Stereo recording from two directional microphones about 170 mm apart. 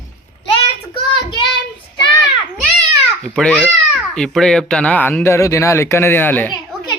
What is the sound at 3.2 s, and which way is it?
Speech, 5° left (ahead or behind).